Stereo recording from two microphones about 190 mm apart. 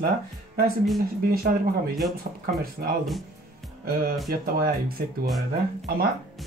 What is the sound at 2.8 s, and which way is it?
Speech, 55° right (ahead or behind).